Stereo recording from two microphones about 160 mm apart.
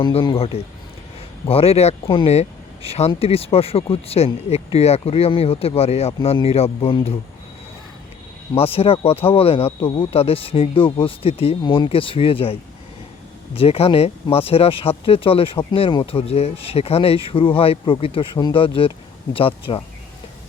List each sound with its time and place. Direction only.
0.0 s speech: 30° left (ahead or behind)
8.5 s speech: 35° left (ahead or behind)